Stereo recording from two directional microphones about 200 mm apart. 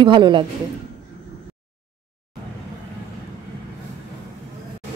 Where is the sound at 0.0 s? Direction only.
25° right (ahead or behind).